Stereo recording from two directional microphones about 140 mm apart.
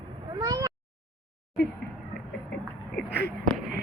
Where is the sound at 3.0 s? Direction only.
Centre (ahead or behind).